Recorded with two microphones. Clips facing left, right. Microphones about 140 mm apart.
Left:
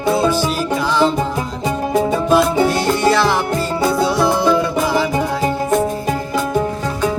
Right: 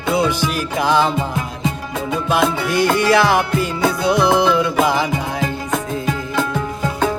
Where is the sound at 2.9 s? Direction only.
55° right (ahead or behind).